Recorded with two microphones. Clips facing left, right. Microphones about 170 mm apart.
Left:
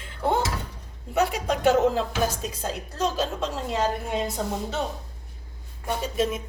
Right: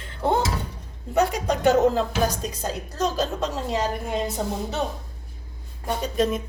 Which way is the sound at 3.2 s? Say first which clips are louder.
Right 2 dB; 40° right (ahead or behind).